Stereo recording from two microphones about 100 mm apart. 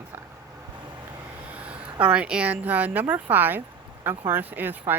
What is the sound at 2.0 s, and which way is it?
Speech, 15° right (ahead or behind).